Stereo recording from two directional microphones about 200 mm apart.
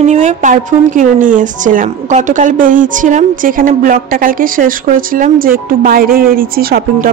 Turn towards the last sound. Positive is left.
turn(degrees=-50)  # may be behind; listen again after turning